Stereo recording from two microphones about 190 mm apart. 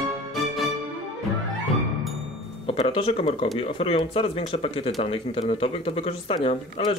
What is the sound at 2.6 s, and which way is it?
Speech, 30° left (ahead or behind).